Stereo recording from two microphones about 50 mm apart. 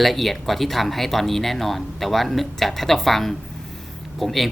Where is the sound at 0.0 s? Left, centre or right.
Centre.